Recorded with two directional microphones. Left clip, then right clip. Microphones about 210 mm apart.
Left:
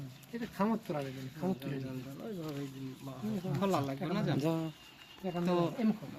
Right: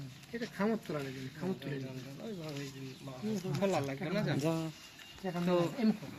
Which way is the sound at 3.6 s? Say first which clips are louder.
Even; 55° left (ahead or behind).